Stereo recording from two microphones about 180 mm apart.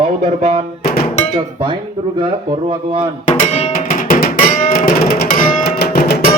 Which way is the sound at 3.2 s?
40° left (ahead or behind).